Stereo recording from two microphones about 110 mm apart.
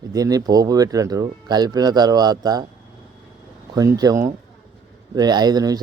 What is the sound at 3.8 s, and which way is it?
Speech, 35° right (ahead or behind).